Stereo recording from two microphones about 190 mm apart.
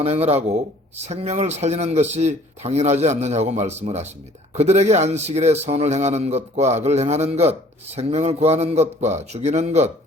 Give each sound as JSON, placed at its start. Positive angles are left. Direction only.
{"t": 0.0, "sound": "a man's voice", "side_deg": -35}